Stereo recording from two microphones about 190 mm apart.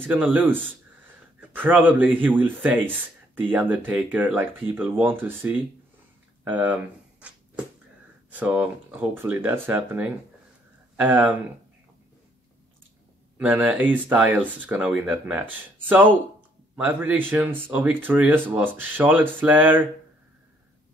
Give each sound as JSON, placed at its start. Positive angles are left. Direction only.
{"t": 0.0, "sound": "speech", "side_deg": -10}
{"t": 6.4, "sound": "a sound", "side_deg": -10}
{"t": 8.3, "sound": "speech", "side_deg": -5}
{"t": 13.4, "sound": "speech", "side_deg": -5}